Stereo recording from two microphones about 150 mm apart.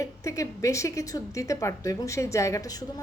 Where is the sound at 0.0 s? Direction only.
20° left (ahead or behind).